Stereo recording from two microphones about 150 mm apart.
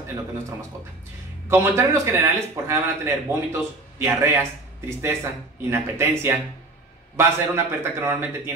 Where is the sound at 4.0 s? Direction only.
15° right (ahead or behind).